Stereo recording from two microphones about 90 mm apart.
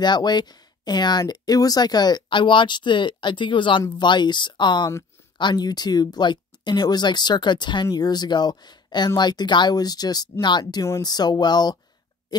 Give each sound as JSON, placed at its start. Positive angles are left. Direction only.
{"t": 0.0, "sound": "speech", "side_deg": 55}